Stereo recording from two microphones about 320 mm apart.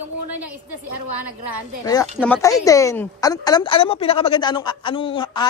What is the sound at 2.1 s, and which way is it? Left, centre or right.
Speech, centre.